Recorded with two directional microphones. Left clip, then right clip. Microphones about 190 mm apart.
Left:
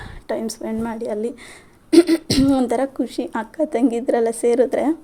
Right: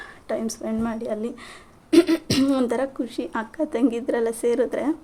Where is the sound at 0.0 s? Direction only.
20° left (ahead or behind).